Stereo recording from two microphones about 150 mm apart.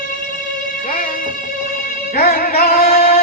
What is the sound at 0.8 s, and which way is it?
Music, 80° left.